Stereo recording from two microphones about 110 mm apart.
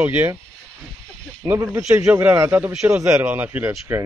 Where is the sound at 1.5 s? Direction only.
25° right (ahead or behind).